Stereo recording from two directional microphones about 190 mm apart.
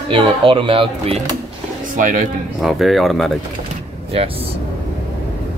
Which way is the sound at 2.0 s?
45° right (ahead or behind).